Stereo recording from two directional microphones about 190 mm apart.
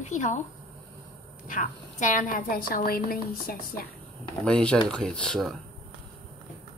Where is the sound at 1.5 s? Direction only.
40° left (ahead or behind).